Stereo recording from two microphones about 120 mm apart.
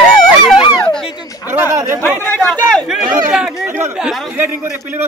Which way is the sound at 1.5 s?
20° right (ahead or behind).